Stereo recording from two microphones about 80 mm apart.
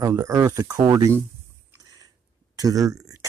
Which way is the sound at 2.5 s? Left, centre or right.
Right.